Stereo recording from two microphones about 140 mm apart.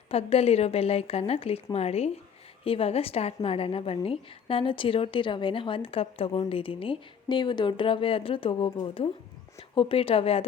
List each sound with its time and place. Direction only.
0.1 s a woman's voice: 45° left (ahead or behind)